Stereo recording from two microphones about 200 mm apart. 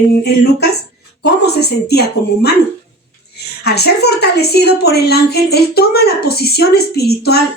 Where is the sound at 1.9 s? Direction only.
55° left (ahead or behind).